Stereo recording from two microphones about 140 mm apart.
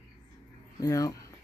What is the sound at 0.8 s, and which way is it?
Speech, 25° left (ahead or behind).